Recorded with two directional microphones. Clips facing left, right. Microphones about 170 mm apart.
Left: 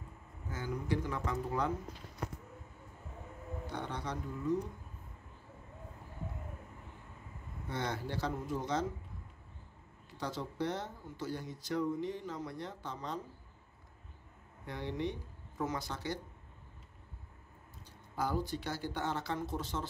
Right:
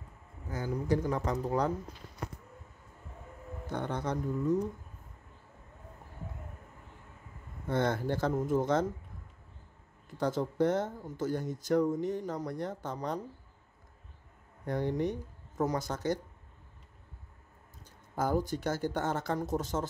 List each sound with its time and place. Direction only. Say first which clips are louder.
0.5 s speech: right 5 dB; 40° right (ahead or behind)
3.6 s speech: right 7 dB; 50° right (ahead or behind)
7.6 s speech: right 8 dB; 50° right (ahead or behind)
10.0 s speech: right 9 dB; 50° right (ahead or behind)
14.7 s speech: right 7 dB; 45° right (ahead or behind)
18.1 s speech: right 5 dB; 45° right (ahead or behind)